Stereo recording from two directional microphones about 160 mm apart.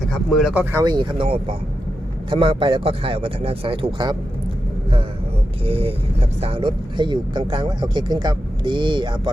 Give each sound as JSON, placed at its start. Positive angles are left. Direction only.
{"t": 0.1, "sound": "speech", "side_deg": 0}
{"t": 0.9, "sound": "speech", "side_deg": -30}
{"t": 5.6, "sound": "speech", "side_deg": -35}